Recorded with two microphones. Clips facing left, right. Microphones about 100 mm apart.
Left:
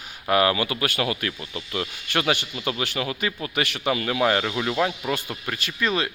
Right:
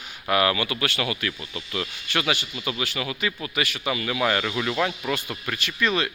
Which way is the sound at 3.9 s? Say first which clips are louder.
Left 3 dB; 40° left (ahead or behind).